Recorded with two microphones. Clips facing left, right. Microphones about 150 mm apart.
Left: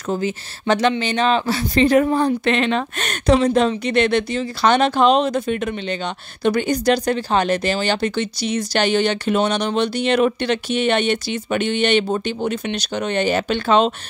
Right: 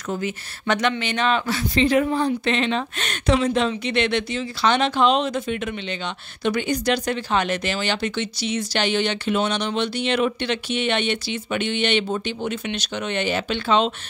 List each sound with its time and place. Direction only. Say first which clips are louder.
0.1 s speech: left 5 dB; 30° left (ahead or behind); by 13.9 s 50° left (ahead or behind)